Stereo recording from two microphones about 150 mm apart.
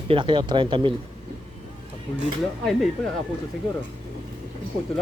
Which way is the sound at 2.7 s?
Centre (ahead or behind).